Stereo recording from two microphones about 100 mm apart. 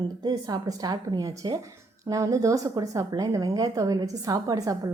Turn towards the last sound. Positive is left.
turn(degrees=-35)  # may be behind; listen again after turning